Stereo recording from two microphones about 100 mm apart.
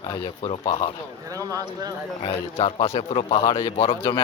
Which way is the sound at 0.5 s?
75° left (ahead or behind).